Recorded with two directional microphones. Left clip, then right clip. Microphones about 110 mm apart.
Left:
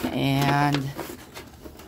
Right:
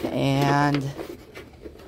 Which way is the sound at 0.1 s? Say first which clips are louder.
Right 2 dB; 25° right (ahead or behind).